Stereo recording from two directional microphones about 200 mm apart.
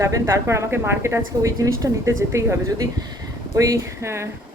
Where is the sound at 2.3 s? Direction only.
15° right (ahead or behind).